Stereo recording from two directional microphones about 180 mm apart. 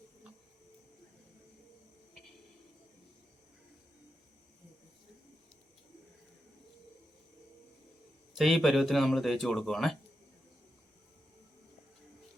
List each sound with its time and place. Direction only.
8.4 s speech: centre (ahead or behind)